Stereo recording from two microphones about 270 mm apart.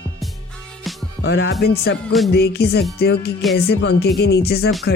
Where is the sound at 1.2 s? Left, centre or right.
Left.